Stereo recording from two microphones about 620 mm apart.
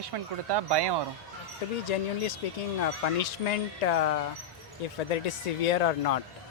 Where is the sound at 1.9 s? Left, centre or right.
Left.